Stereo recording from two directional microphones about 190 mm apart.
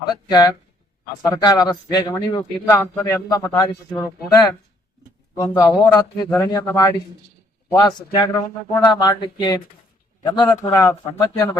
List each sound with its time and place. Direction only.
0.0 s a man's voice: 20° left (ahead or behind)
5.4 s a man's voice: 20° left (ahead or behind)